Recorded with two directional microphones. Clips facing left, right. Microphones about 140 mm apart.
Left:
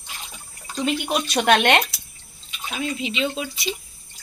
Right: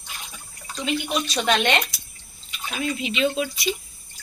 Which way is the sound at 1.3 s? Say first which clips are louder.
Left 5 dB; 60° left (ahead or behind).